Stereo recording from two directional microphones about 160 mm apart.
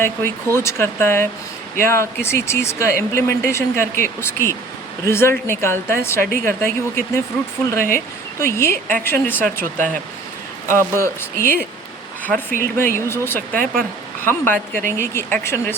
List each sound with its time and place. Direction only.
0.0 s speech: 15° left (ahead or behind)